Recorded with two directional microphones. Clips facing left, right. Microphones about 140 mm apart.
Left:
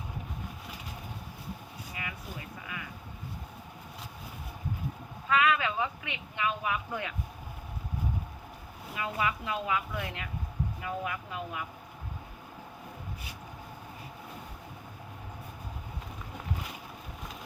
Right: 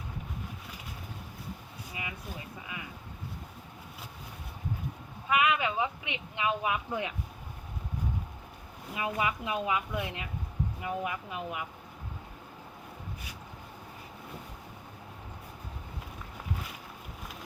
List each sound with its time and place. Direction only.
5.3 s speech: 15° right (ahead or behind)
9.0 s speech: 20° right (ahead or behind)